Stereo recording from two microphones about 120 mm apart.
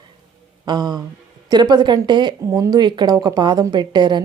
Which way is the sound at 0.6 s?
35° right (ahead or behind).